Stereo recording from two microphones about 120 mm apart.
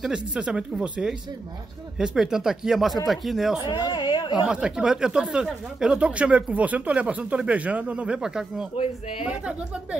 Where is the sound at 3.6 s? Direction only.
35° left (ahead or behind).